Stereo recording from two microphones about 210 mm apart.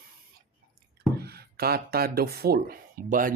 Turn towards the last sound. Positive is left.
turn(degrees=-40)  # may be behind; listen again after turning